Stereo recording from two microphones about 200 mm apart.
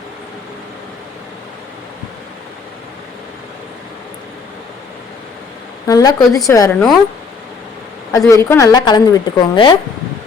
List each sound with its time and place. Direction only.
5.9 s a woman's voice: 20° left (ahead or behind)
8.1 s a woman's voice: 15° left (ahead or behind)